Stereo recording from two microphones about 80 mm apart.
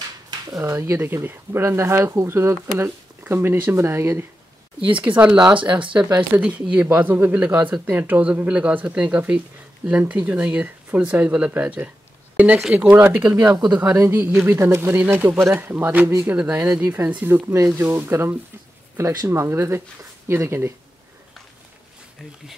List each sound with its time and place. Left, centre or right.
0.5 s speech: right
5.1 s speech: centre
5.6 s speech: right
6.3 s speech: right
7.4 s speech: centre; by 20.7 s right